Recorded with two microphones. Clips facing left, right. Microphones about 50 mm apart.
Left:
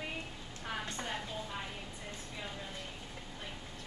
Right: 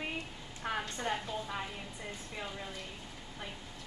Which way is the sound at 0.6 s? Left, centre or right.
Centre.